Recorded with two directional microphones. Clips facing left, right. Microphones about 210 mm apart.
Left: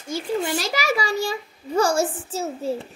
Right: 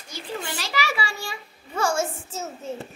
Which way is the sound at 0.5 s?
45° left (ahead or behind).